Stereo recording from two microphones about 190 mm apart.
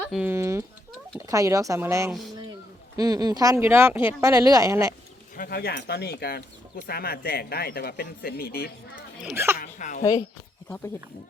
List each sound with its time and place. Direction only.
0.1 s speech: 10° right (ahead or behind)
5.4 s speech: 55° left (ahead or behind)
9.3 s speech: 15° right (ahead or behind)
9.6 s speech: 45° left (ahead or behind)
10.0 s speech: 20° left (ahead or behind)